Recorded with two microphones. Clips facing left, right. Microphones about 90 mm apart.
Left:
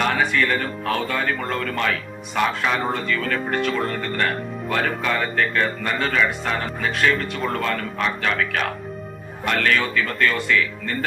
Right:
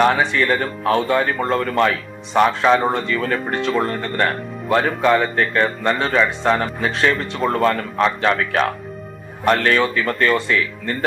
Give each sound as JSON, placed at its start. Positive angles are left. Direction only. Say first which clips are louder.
{"t": 0.3, "sound": "speech", "louder": "right 3 dB", "side_deg": -35}